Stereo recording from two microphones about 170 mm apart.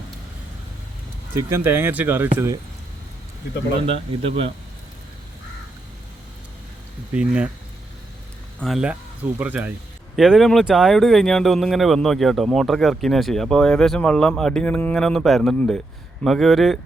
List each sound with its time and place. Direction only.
1.4 s speech: 15° right (ahead or behind)
3.8 s a man's voice: 35° right (ahead or behind)
7.1 s speech: 5° right (ahead or behind)
8.6 s speech: 5° right (ahead or behind)